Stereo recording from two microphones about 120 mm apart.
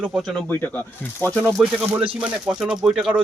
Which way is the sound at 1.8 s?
15° right (ahead or behind).